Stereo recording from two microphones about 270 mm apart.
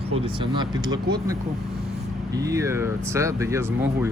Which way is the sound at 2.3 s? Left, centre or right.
Centre.